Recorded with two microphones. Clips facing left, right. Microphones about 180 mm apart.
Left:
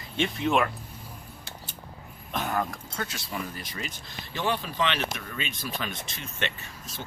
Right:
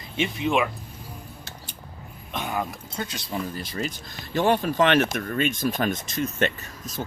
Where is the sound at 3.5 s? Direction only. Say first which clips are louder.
Right 7 dB; 30° right (ahead or behind).